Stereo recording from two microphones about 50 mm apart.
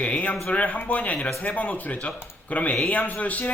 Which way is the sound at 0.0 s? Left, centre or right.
Left.